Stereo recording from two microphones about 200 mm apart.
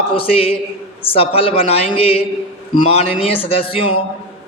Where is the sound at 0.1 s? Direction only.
30° left (ahead or behind).